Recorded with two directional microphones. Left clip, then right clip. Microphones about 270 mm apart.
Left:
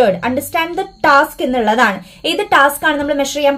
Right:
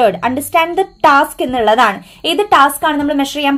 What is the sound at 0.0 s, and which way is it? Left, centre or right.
A woman's voice, right.